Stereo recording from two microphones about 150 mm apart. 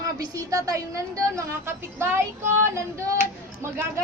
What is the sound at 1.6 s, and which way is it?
A woman's voice, 15° right (ahead or behind).